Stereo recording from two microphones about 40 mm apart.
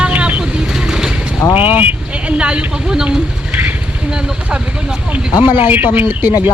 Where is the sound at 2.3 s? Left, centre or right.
Right.